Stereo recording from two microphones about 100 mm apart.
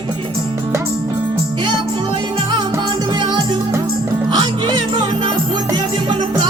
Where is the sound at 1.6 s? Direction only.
50° right (ahead or behind).